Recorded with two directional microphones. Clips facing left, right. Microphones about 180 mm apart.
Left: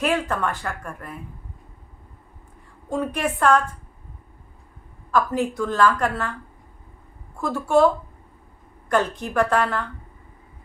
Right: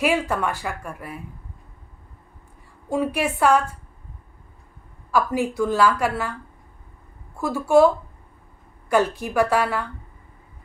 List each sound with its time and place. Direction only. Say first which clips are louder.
0.0 s a woman's voice: right 1 dB; 10° right (ahead or behind)
2.9 s a woman's voice: right 2 dB; 10° right (ahead or behind)
5.1 s a woman's voice: even; 10° right (ahead or behind)
7.3 s a woman's voice: right 2 dB; 10° right (ahead or behind)